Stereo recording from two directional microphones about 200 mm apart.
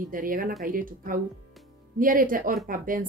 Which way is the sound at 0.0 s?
45° right (ahead or behind).